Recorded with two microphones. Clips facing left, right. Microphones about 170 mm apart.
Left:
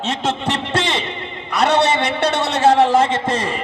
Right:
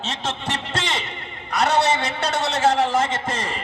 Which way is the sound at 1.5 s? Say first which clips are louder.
Left 3 dB; 65° left (ahead or behind).